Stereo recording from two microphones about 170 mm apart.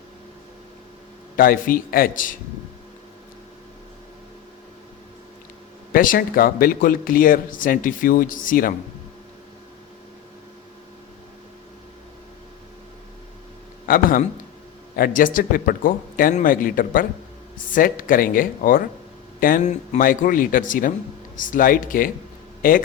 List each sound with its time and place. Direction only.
1.4 s speech: 55° left (ahead or behind)
5.9 s speech: 55° left (ahead or behind)
13.8 s a man's voice: 55° left (ahead or behind)